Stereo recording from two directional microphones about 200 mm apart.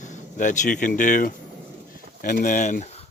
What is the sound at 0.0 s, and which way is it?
Speech, 40° left (ahead or behind).